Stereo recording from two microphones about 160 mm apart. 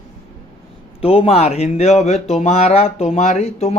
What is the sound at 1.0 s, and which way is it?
Speech, 35° left (ahead or behind).